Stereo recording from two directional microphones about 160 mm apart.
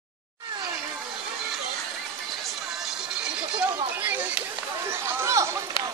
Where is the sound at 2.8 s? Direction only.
5° right (ahead or behind).